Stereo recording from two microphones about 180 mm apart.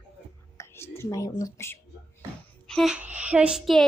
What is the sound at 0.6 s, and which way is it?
Speech, 15° left (ahead or behind).